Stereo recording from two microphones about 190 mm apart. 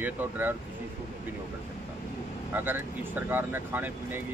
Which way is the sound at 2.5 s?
10° right (ahead or behind).